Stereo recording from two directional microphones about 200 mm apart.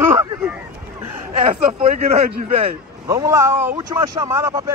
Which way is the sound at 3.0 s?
15° right (ahead or behind).